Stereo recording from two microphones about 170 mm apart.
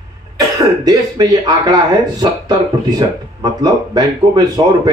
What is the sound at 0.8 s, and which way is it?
Speech, 25° right (ahead or behind).